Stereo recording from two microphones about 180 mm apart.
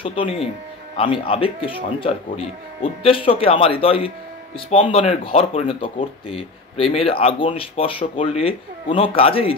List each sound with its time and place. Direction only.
0.0 s speech: 30° left (ahead or behind)